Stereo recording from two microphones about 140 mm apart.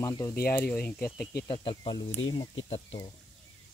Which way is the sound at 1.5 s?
35° left (ahead or behind).